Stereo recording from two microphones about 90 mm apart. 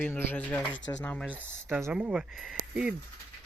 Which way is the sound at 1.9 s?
10° right (ahead or behind).